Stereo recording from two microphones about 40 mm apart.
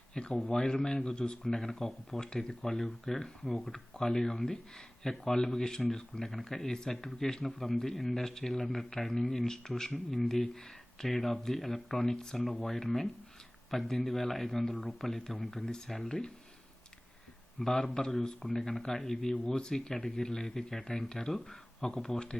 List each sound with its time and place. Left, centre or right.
0.1 s speech: left
2.2 s a man's voice: centre
17.6 s a man's voice: centre